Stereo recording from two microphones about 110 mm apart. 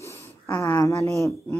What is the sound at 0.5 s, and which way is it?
Speech, 25° left (ahead or behind).